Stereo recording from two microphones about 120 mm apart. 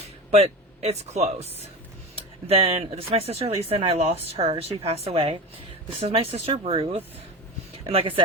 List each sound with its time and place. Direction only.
0.3 s speech: 60° right (ahead or behind)